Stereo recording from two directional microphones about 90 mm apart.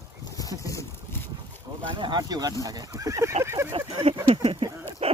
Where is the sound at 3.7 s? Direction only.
65° right (ahead or behind).